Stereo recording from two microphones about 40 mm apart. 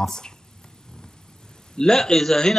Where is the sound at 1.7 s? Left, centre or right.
Centre.